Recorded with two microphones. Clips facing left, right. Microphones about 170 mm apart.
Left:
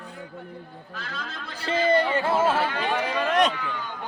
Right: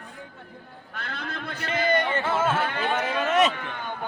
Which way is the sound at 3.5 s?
55° right (ahead or behind).